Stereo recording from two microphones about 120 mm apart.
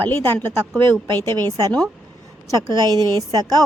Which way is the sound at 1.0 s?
35° right (ahead or behind).